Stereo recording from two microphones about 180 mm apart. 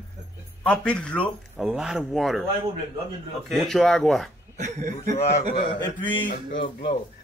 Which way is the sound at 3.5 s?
Centre (ahead or behind).